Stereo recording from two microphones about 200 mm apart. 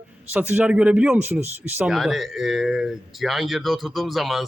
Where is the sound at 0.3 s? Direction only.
10° right (ahead or behind).